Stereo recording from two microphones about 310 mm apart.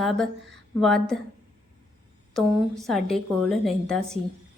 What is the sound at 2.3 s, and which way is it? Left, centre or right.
A woman's voice, centre.